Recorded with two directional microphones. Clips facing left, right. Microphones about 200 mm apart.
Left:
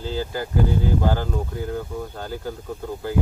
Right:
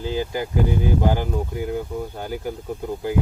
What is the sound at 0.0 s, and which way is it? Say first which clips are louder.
Speech: right 2 dB; 15° right (ahead or behind).